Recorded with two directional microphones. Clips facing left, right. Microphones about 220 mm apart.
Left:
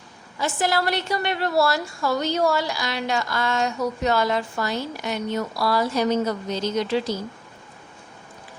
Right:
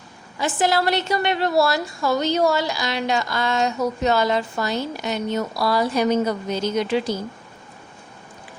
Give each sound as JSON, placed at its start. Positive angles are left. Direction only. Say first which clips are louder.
{"t": 0.3, "sound": "a woman's voice", "louder": "right 3 dB", "side_deg": -20}